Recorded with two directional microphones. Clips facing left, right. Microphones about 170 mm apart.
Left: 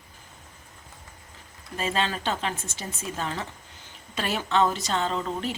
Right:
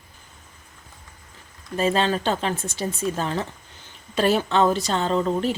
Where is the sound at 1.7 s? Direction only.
35° right (ahead or behind).